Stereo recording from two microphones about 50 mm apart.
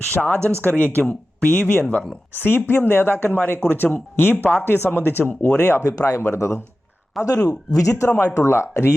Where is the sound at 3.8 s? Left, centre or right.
Left.